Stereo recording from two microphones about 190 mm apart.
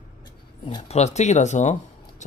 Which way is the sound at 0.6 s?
30° left (ahead or behind).